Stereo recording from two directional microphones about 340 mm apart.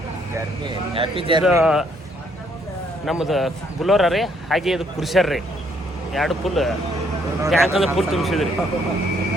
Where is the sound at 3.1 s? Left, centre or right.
Centre.